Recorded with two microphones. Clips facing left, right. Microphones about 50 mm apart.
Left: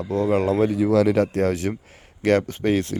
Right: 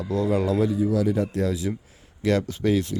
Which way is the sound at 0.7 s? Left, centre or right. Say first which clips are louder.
Left 5 dB; left.